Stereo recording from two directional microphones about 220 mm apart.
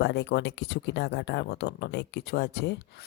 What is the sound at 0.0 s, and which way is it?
Speech, 50° left (ahead or behind).